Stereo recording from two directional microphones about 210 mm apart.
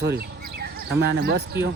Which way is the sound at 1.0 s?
50° right (ahead or behind).